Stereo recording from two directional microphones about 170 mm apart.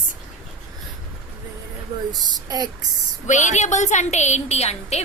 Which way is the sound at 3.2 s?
45° left (ahead or behind).